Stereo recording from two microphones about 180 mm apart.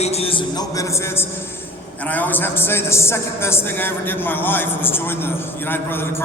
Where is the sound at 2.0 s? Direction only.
10° left (ahead or behind).